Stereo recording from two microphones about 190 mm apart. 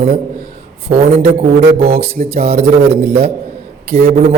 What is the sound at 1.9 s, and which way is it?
Speech, 50° right (ahead or behind).